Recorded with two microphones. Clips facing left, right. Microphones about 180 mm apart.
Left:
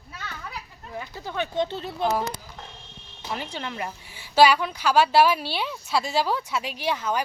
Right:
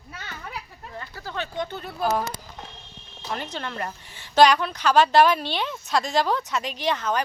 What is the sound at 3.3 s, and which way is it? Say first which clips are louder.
A woman's voice: right 1 dB; 10° left (ahead or behind).